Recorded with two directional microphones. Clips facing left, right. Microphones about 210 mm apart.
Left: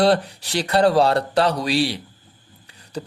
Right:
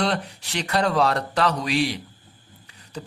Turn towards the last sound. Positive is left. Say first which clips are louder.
# left 5 dB
turn(degrees=35)  # may be behind; listen again after turning